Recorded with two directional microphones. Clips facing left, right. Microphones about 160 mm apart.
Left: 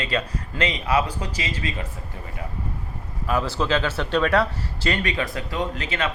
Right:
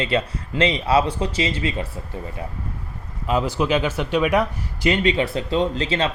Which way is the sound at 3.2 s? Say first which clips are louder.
Right 3 dB; 20° right (ahead or behind).